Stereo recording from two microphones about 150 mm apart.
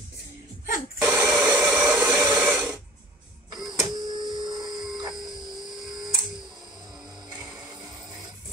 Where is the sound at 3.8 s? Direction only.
30° right (ahead or behind).